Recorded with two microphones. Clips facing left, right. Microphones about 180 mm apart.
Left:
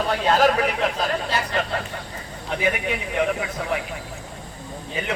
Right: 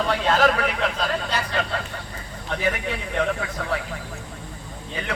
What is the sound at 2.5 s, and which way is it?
A man's voice, 15° left (ahead or behind).